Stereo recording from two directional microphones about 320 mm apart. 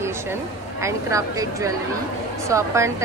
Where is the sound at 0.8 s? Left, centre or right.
Centre.